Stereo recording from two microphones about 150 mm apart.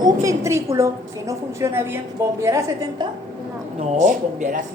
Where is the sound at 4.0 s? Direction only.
55° right (ahead or behind).